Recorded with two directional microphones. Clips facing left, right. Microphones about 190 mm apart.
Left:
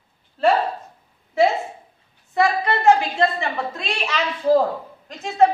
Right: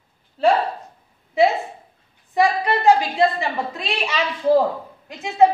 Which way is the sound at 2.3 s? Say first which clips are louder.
Right 1 dB; 15° right (ahead or behind).